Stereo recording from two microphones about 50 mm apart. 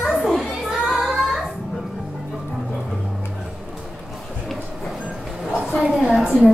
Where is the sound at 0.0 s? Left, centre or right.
Centre.